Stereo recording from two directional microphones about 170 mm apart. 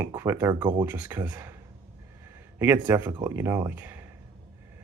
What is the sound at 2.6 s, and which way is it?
Speech, 10° right (ahead or behind).